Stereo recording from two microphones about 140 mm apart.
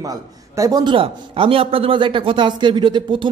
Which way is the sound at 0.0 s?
25° right (ahead or behind).